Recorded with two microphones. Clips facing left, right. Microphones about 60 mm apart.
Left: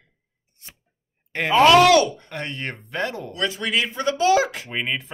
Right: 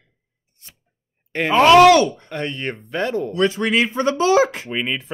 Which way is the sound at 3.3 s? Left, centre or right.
Right.